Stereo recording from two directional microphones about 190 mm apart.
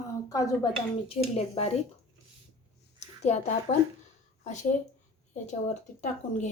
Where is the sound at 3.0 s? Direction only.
35° left (ahead or behind).